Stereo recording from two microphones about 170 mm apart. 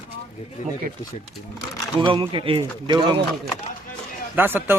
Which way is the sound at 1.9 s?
30° right (ahead or behind).